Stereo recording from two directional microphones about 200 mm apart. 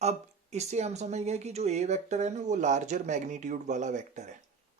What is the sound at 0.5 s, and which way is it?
Speech, 35° right (ahead or behind).